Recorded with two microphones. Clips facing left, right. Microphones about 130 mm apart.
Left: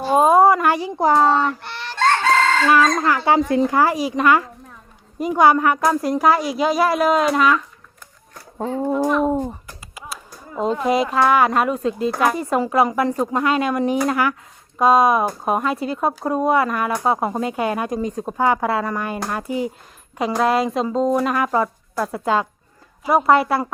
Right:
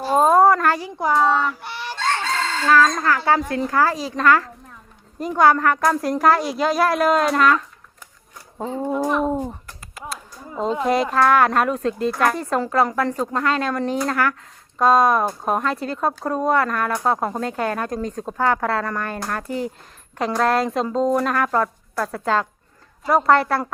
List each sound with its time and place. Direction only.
0.0 s a sound: 5° left (ahead or behind)
0.9 s a child's voice: 35° left (ahead or behind)
1.4 s fowl: 5° right (ahead or behind)
2.0 s chicken: 65° left (ahead or behind)
2.6 s a woman's voice: 15° left (ahead or behind)
8.8 s speech: 5° left (ahead or behind)
9.5 s a sound: 5° left (ahead or behind)
10.6 s a woman's voice: 5° left (ahead or behind)